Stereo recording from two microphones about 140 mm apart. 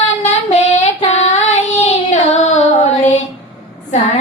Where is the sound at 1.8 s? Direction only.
55° left (ahead or behind).